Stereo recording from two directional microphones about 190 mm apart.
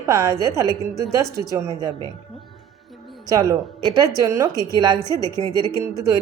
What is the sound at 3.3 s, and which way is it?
A woman's voice, 20° right (ahead or behind).